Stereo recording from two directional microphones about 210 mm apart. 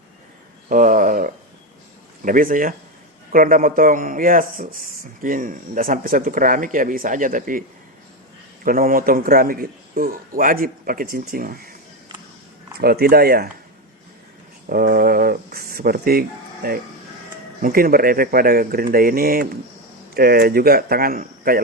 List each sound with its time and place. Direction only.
0.7 s a sound: 40° right (ahead or behind)
2.2 s speech: 40° right (ahead or behind)
8.6 s a man's voice: 40° right (ahead or behind)
12.8 s a man's voice: 45° right (ahead or behind)
14.7 s a man's voice: 45° right (ahead or behind)